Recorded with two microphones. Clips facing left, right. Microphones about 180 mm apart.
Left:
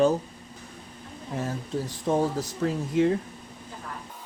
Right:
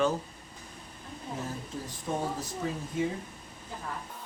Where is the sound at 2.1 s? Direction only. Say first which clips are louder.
Left 8 dB; 80° left.